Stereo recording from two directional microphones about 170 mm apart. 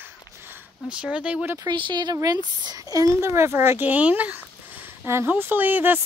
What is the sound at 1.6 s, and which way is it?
Speech, 25° right (ahead or behind).